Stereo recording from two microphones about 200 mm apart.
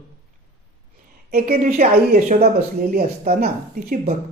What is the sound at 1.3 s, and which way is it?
Speech, 50° right (ahead or behind).